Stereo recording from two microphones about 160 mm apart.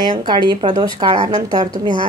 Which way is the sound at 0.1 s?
30° right (ahead or behind).